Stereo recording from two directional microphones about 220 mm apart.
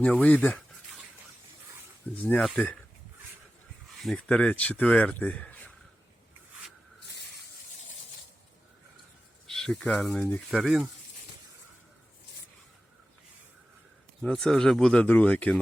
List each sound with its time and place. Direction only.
0.0 s speech: 5° left (ahead or behind)
2.2 s speech: centre (ahead or behind)
3.9 s speech: centre (ahead or behind)
9.5 s speech: centre (ahead or behind)
14.2 s speech: 5° left (ahead or behind)